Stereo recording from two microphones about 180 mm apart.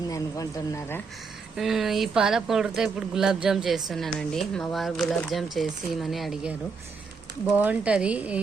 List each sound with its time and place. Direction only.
0.1 s speech: 20° left (ahead or behind)
1.5 s speech: centre (ahead or behind)